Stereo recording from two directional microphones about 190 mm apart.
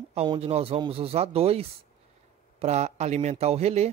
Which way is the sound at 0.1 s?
30° right (ahead or behind).